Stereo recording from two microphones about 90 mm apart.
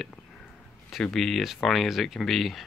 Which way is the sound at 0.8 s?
Centre (ahead or behind).